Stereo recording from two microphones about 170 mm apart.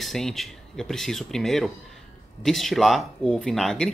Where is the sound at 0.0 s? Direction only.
Centre (ahead or behind).